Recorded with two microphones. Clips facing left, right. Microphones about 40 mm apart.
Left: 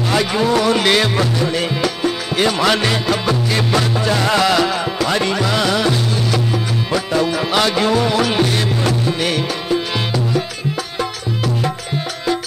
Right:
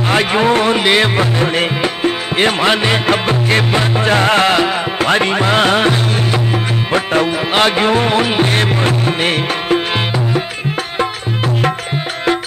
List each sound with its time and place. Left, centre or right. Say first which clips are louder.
0.1 s music: right 4 dB; right
0.7 s music: right 2 dB; right
3.1 s music: right 4 dB; right